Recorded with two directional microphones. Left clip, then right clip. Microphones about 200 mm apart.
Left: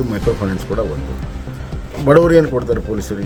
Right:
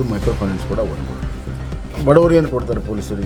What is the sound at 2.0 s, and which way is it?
Speech, 15° left (ahead or behind).